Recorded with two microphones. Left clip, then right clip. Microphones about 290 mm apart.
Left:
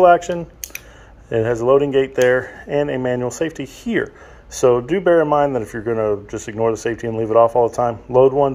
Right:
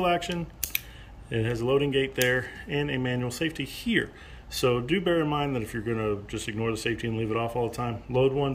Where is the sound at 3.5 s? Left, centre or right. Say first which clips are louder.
Left 5 dB; left.